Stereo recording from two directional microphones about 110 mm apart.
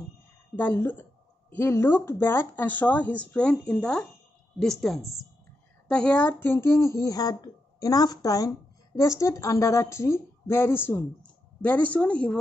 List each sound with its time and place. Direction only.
0.6 s a woman's voice: 20° left (ahead or behind)